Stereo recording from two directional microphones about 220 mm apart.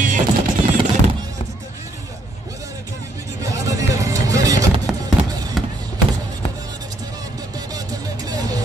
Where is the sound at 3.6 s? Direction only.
15° right (ahead or behind).